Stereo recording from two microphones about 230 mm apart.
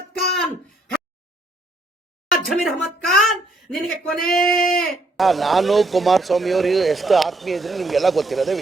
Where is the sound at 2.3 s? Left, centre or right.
Centre.